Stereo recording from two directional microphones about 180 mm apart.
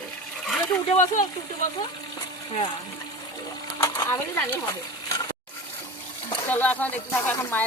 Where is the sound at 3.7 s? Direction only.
20° left (ahead or behind).